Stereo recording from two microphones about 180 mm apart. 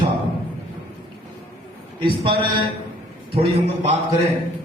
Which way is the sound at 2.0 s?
30° right (ahead or behind).